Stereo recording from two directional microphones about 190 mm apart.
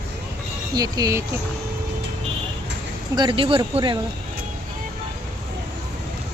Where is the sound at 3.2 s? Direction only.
25° right (ahead or behind).